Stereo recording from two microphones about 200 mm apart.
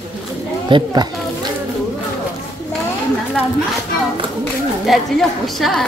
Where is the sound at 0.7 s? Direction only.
20° right (ahead or behind).